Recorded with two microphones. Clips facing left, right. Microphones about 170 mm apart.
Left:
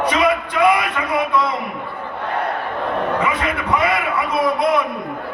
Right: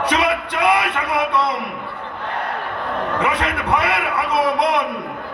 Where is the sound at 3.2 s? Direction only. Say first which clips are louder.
Even; 65° right (ahead or behind).